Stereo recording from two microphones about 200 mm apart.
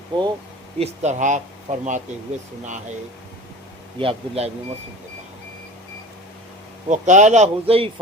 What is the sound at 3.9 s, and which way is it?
Speech, 30° right (ahead or behind).